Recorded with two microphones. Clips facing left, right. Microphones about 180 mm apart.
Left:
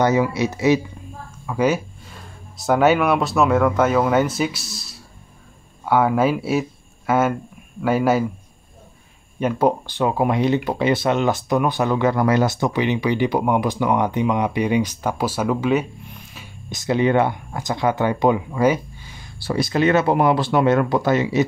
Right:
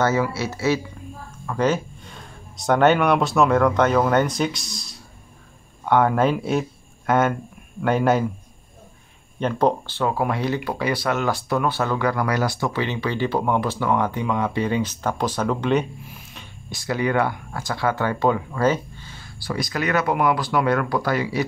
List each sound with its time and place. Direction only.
0.0 s speech: 15° left (ahead or behind)
9.4 s speech: 10° left (ahead or behind)
16.7 s speech: 20° left (ahead or behind)
19.4 s speech: 25° left (ahead or behind)